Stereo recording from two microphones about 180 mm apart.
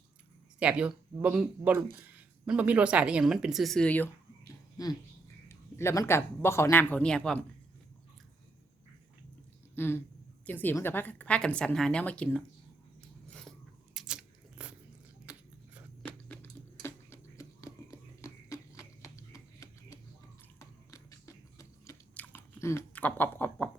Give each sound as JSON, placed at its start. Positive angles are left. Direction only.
{"t": 0.6, "sound": "speech", "side_deg": -5}
{"t": 5.5, "sound": "a woman's voice", "side_deg": 15}
{"t": 9.7, "sound": "a woman's voice", "side_deg": 10}
{"t": 13.9, "sound": "scissors", "side_deg": -5}
{"t": 16.0, "sound": "a sound", "side_deg": 10}